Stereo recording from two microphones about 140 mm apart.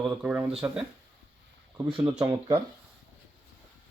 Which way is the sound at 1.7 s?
40° right (ahead or behind).